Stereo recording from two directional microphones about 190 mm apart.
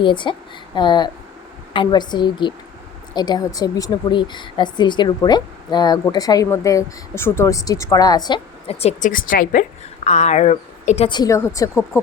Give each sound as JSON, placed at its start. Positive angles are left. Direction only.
{"t": 0.0, "sound": "speech", "side_deg": 25}